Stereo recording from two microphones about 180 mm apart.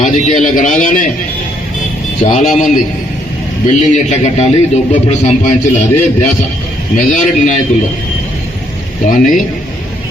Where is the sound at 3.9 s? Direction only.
40° left (ahead or behind).